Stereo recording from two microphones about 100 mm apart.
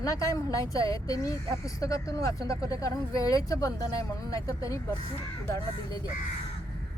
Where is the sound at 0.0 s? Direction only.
35° left (ahead or behind).